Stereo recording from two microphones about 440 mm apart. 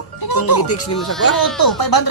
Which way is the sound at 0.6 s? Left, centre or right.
Left.